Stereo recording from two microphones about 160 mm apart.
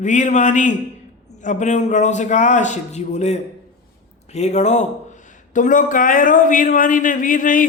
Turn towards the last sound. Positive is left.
turn(degrees=55)  # may be behind; listen again after turning